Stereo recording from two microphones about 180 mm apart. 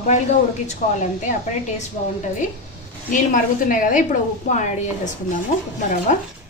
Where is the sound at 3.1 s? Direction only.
50° left (ahead or behind).